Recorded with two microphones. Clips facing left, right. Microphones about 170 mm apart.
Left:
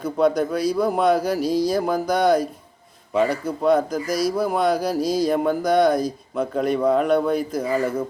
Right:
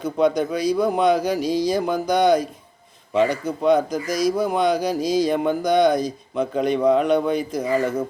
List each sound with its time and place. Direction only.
0.0 s speech: 5° left (ahead or behind)
3.6 s speech: centre (ahead or behind)